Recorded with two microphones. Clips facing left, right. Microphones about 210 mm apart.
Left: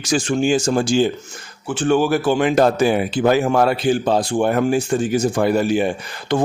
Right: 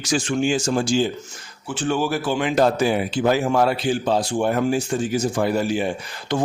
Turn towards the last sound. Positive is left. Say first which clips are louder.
# left 4 dB
turn(degrees=55)  # may be behind; listen again after turning